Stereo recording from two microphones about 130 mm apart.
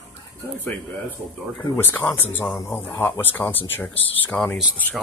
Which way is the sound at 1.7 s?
15° left (ahead or behind).